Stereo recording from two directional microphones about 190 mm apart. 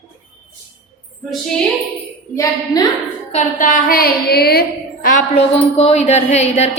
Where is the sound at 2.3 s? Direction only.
15° left (ahead or behind).